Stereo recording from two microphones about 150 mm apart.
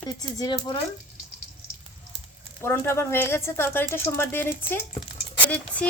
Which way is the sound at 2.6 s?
15° left (ahead or behind).